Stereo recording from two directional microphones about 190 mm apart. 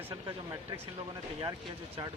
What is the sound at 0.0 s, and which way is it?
Speech, 15° right (ahead or behind).